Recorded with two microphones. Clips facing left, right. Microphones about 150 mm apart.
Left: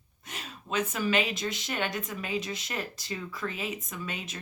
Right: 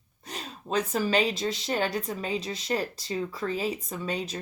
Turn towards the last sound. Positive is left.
turn(degrees=-35)  # may be behind; listen again after turning